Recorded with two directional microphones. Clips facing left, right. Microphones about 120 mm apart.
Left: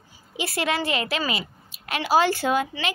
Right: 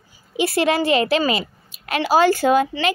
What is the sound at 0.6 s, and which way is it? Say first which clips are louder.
Speech: right 7 dB; 25° right (ahead or behind).